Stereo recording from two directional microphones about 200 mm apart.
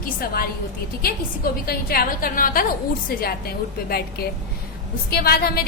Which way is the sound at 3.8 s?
50° left (ahead or behind).